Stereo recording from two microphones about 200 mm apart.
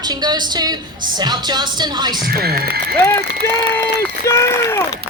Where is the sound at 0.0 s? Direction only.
20° right (ahead or behind).